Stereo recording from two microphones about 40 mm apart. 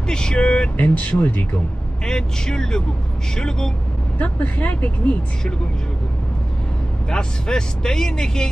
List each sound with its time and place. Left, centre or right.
0.1 s speech: centre
0.7 s speech: left
2.0 s speech: centre
4.2 s speech: left
7.1 s speech: centre